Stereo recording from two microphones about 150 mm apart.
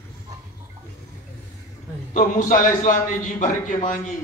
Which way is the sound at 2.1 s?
60° left (ahead or behind).